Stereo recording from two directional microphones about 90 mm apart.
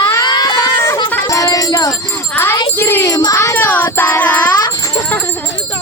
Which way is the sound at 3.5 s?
20° left (ahead or behind).